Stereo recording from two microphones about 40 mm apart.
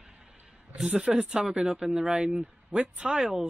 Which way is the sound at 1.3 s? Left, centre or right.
Right.